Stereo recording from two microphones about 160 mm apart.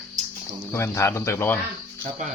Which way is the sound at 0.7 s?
15° left (ahead or behind).